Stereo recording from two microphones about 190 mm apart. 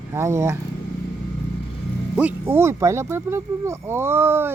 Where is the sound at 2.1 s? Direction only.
10° right (ahead or behind).